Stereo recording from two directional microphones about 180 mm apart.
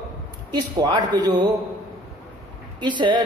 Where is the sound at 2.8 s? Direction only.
25° right (ahead or behind).